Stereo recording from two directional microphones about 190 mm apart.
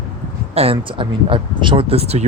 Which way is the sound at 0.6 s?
30° right (ahead or behind).